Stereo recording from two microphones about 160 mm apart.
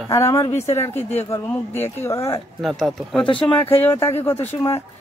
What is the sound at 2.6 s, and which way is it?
Speech, centre (ahead or behind).